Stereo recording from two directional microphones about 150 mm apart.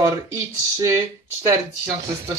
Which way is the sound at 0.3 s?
20° right (ahead or behind).